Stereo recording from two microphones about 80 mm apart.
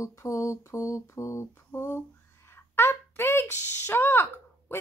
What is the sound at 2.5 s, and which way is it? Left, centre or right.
Speech, left.